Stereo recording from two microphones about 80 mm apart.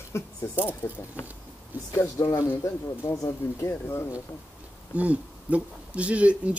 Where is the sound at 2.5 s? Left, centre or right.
Left.